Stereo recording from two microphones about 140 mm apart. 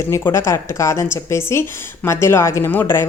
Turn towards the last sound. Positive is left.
turn(degrees=15)  # may be behind; listen again after turning